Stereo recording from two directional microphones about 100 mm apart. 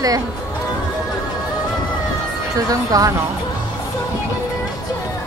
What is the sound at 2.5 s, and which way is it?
Speech, 35° right (ahead or behind).